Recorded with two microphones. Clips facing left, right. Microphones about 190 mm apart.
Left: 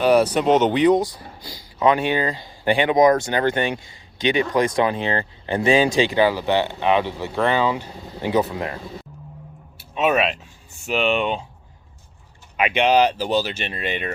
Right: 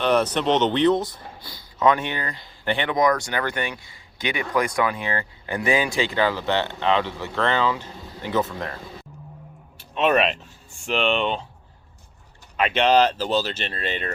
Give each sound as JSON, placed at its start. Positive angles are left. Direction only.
{"t": 0.0, "sound": "speech", "side_deg": 10}
{"t": 9.7, "sound": "speech", "side_deg": 5}
{"t": 12.5, "sound": "speech", "side_deg": 10}